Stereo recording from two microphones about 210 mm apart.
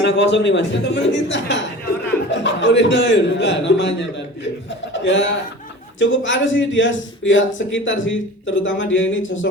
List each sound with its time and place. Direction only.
0.0 s speech: 55° left (ahead or behind)
4.9 s speech: 60° left (ahead or behind)